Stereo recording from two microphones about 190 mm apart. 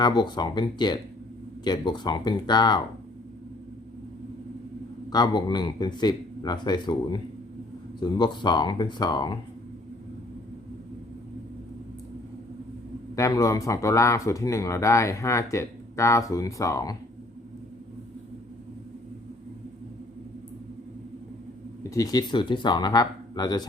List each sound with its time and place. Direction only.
0.0 s speech: 25° left (ahead or behind)
5.1 s speech: 20° left (ahead or behind)
13.1 s speech: 15° left (ahead or behind)
21.8 s speech: 20° left (ahead or behind)